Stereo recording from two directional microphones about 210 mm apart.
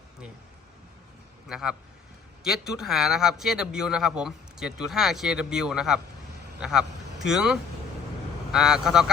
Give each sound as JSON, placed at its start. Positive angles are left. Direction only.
{"t": 1.5, "sound": "a man's voice", "side_deg": -5}